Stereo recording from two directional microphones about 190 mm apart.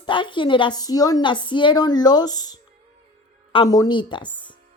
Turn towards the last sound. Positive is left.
turn(degrees=25)  # may be behind; listen again after turning